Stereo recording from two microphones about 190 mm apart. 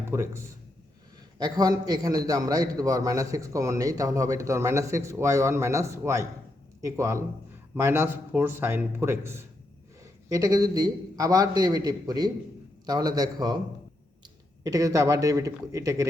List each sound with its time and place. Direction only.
0.1 s a man's voice: 15° right (ahead or behind)
14.6 s a man's voice: 20° right (ahead or behind)